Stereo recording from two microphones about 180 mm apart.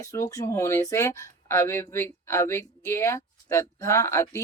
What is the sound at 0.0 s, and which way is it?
Speech, 20° left (ahead or behind).